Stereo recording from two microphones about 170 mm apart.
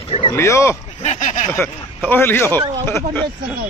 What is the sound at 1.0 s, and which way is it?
Speech, 45° left (ahead or behind).